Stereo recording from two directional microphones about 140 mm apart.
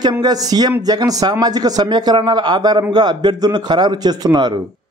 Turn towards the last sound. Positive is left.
turn(degrees=-30)  # may be behind; listen again after turning